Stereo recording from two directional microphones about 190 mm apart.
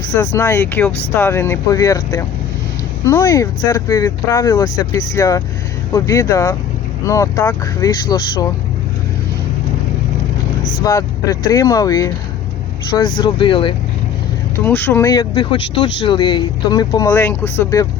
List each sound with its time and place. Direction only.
0.3 s speech: 15° left (ahead or behind)
10.8 s speech: 20° left (ahead or behind)
13.1 s speech: 25° left (ahead or behind)
14.6 s speech: 10° left (ahead or behind)